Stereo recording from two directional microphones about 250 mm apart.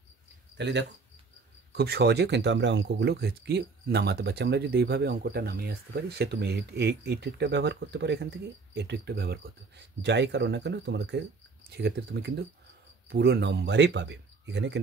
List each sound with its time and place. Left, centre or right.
0.6 s speech: right